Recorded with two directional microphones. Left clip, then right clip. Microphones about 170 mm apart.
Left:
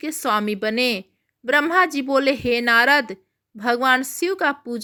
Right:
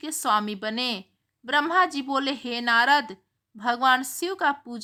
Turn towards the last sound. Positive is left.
turn(degrees=10)  # may be behind; listen again after turning